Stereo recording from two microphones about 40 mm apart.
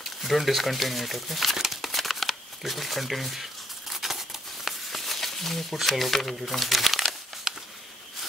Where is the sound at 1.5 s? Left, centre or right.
Centre.